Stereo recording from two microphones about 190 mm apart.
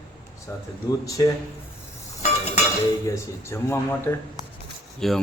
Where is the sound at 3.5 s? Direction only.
15° left (ahead or behind).